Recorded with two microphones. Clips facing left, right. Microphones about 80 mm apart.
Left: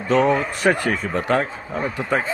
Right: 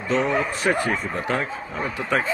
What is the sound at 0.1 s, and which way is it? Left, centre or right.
A man's voice, left.